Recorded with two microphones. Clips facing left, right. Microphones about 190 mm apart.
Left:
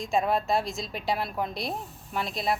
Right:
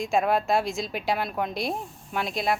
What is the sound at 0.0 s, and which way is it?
Speech, centre (ahead or behind).